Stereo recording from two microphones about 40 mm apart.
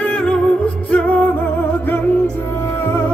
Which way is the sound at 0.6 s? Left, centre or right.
Left.